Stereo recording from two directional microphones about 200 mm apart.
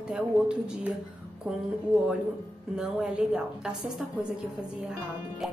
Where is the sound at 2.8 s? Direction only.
5° right (ahead or behind).